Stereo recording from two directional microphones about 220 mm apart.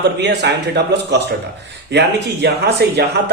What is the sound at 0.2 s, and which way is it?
Speech, 50° right (ahead or behind).